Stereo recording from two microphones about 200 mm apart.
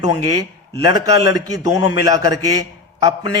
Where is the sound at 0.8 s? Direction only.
20° right (ahead or behind).